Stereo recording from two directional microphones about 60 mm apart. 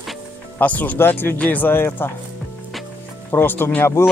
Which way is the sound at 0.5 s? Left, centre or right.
Left.